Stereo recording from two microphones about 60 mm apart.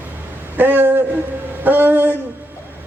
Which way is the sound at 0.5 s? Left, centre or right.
Right.